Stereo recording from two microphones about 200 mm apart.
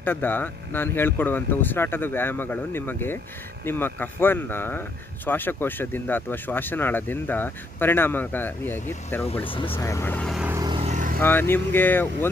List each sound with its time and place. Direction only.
0.0 s speech: 10° left (ahead or behind)
9.5 s speech: 25° left (ahead or behind); by 10.5 s centre (ahead or behind)
10.5 s vehicle: 20° right (ahead or behind)
10.8 s vehicle: 40° right (ahead or behind)
11.1 s speech: 10° left (ahead or behind)